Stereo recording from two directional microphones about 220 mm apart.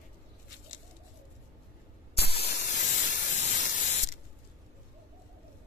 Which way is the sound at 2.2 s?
30° left (ahead or behind).